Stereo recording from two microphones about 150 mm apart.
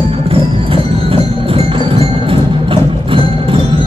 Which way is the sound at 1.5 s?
35° right (ahead or behind).